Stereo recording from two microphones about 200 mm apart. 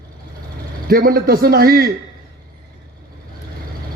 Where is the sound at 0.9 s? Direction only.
50° right (ahead or behind).